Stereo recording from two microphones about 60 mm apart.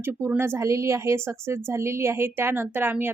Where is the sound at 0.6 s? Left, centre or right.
Right.